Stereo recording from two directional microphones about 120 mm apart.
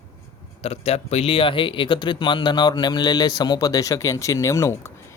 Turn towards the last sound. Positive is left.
turn(degrees=25)  # may be behind; listen again after turning